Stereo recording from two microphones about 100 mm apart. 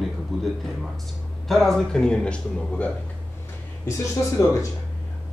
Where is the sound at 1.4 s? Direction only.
Centre (ahead or behind).